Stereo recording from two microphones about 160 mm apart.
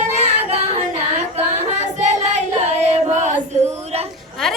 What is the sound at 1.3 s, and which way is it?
Singing, 45° right (ahead or behind).